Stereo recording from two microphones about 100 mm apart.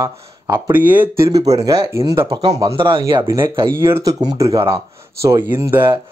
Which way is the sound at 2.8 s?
55° right (ahead or behind).